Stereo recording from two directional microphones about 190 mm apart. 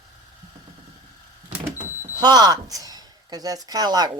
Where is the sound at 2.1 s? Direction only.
20° right (ahead or behind).